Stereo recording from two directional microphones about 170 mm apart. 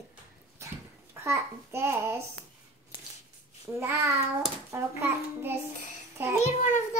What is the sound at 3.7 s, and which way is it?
Child singing, 15° right (ahead or behind).